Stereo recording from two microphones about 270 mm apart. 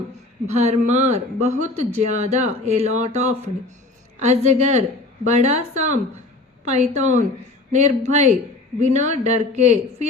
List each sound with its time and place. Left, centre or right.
0.4 s speech: right